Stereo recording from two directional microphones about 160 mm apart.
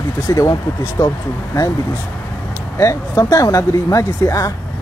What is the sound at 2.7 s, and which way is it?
Speech, 20° left (ahead or behind).